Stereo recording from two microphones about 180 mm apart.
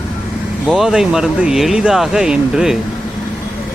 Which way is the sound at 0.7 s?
Centre (ahead or behind).